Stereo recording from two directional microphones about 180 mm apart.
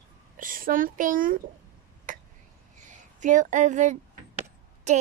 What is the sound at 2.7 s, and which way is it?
A woman's voice, 45° right (ahead or behind).